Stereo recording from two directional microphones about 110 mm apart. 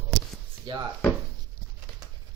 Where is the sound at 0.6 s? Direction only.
45° right (ahead or behind).